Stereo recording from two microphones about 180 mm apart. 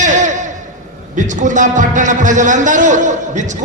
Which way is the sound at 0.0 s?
45° right (ahead or behind).